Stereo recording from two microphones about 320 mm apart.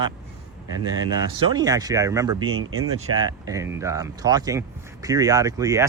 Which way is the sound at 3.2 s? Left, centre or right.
Centre.